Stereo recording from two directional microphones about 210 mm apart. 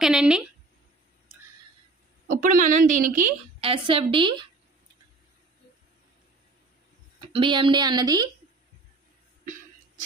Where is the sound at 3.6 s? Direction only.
25° right (ahead or behind).